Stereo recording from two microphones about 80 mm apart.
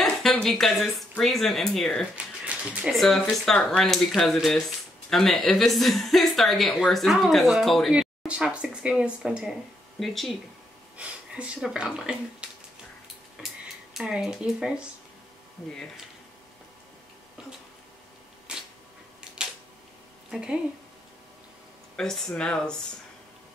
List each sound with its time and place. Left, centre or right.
0.0 s speech: centre
2.1 s a sound: centre
2.9 s speech: centre
8.3 s speech: centre
11.0 s speech: centre
13.9 s speech: centre
18.5 s a sound: centre
19.4 s camera: centre
20.2 s speech: centre
21.9 s speech: centre